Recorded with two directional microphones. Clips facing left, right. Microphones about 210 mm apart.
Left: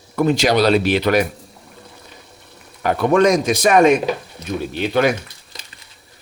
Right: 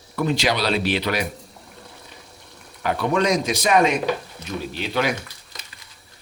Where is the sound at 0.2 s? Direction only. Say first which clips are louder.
Left 7 dB; 45° left (ahead or behind).